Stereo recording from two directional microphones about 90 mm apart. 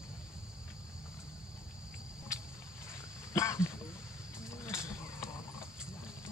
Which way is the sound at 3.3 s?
35° left (ahead or behind).